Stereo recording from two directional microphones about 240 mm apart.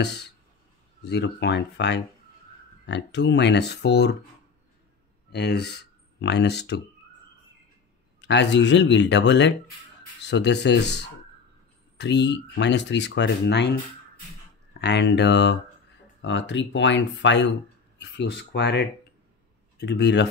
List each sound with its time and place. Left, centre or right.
0.0 s speech: left
5.3 s speech: left
8.2 s speech: left